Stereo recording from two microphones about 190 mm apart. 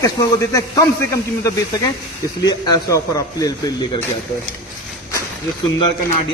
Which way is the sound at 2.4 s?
20° left (ahead or behind).